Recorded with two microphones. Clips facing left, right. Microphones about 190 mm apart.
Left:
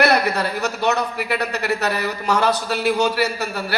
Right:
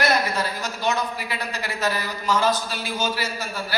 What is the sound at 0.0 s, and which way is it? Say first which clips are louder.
A man's voice: left 5 dB; 65° left (ahead or behind).